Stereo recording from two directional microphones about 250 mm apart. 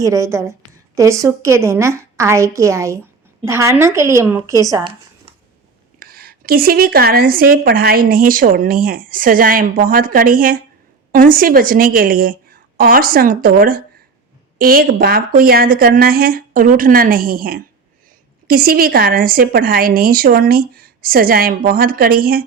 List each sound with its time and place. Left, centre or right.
0.0 s a woman's voice: centre
6.0 s speech: right